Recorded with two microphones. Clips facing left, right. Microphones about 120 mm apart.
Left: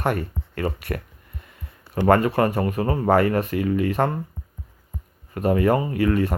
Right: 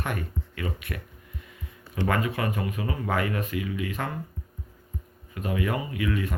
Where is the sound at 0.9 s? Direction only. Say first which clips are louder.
Left 8 dB; 50° left (ahead or behind).